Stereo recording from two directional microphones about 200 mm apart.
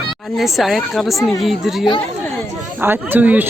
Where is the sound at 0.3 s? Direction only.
Centre (ahead or behind).